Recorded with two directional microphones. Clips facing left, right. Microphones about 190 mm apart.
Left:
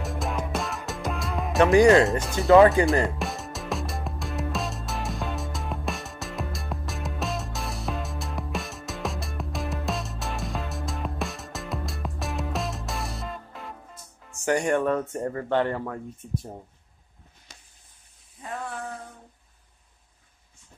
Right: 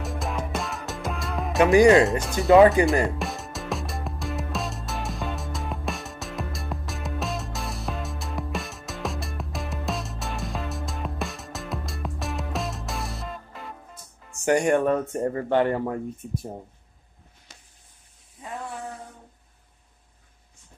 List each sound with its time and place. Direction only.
0.0 s music: centre (ahead or behind)
1.7 s speech: 15° right (ahead or behind)
2.0 s speech: centre (ahead or behind)
2.6 s speech: 20° right (ahead or behind)
3.1 s music: centre (ahead or behind)
14.4 s speech: 15° right (ahead or behind)